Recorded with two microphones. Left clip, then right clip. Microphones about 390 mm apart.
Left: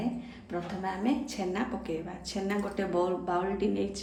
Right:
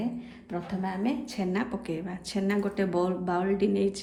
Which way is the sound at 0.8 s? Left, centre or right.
Centre.